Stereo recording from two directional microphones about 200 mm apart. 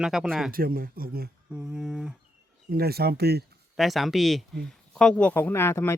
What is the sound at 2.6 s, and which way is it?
Speech, 50° right (ahead or behind).